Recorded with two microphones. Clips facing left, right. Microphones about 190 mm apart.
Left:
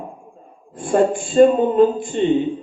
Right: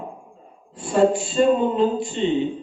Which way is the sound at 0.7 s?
50° left (ahead or behind).